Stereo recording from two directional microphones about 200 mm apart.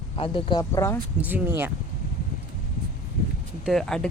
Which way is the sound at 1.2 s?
10° right (ahead or behind).